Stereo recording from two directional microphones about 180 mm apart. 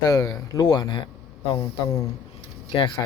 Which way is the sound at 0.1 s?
20° left (ahead or behind).